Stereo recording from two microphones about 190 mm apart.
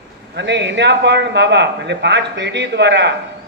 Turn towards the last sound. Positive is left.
turn(degrees=-65)  # may be behind; listen again after turning